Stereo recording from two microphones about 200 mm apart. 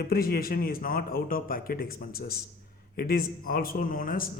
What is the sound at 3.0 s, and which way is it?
Speech, 45° left (ahead or behind).